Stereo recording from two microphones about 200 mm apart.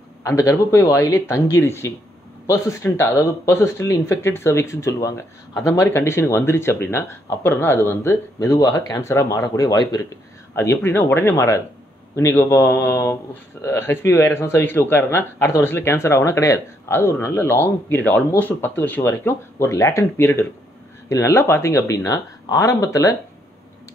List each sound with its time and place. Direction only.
0.2 s speech: 15° left (ahead or behind)